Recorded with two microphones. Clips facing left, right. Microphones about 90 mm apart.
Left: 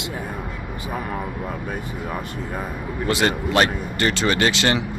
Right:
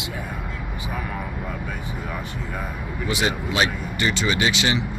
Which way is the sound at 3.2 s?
55° left (ahead or behind).